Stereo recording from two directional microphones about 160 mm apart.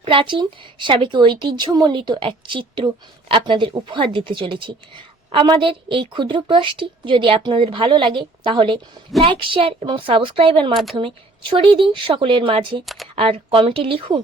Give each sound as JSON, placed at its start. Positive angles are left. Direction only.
{"t": 0.0, "sound": "speech", "side_deg": -30}
{"t": 12.8, "sound": "speech", "side_deg": 0}
{"t": 13.1, "sound": "speech", "side_deg": -35}